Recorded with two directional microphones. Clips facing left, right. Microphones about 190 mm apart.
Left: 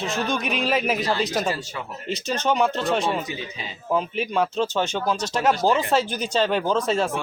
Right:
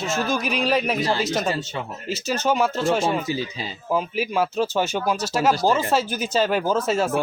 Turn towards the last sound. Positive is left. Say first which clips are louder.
# right 1 dB
turn(degrees=-5)  # may be behind; listen again after turning